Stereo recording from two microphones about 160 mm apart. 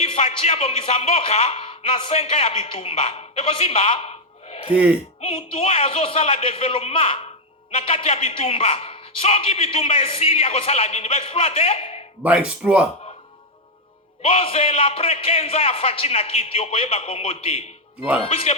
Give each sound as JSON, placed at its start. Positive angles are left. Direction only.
{"t": 0.0, "sound": "a man's voice", "side_deg": 40}
{"t": 4.7, "sound": "speech", "side_deg": -5}
{"t": 5.2, "sound": "a man's voice", "side_deg": 40}
{"t": 12.2, "sound": "speech", "side_deg": -5}
{"t": 14.2, "sound": "a man's voice", "side_deg": 35}